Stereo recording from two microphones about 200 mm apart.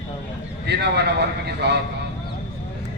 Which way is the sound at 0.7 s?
55° right (ahead or behind).